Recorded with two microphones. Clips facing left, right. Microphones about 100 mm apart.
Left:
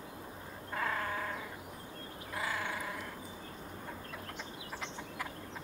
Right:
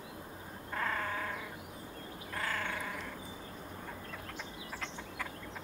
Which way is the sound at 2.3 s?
10° left (ahead or behind).